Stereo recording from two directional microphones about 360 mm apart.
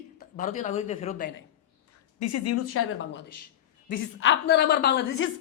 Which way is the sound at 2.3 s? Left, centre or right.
Left.